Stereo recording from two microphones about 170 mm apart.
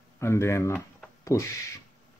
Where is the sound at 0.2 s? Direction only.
15° left (ahead or behind).